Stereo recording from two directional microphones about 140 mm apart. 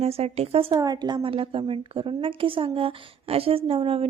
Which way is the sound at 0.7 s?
25° right (ahead or behind).